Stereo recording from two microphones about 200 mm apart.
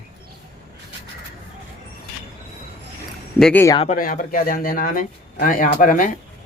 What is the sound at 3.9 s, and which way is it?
A man's voice, 45° left (ahead or behind).